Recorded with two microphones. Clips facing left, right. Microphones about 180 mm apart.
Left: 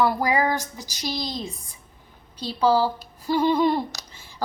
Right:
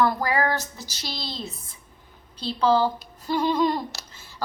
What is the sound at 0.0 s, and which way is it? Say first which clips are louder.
Speech: left 1 dB; 10° left (ahead or behind).